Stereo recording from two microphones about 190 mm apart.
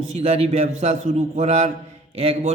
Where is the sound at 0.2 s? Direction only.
30° right (ahead or behind).